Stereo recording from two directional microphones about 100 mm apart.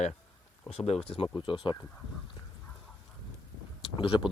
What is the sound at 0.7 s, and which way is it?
Speech, 85° left.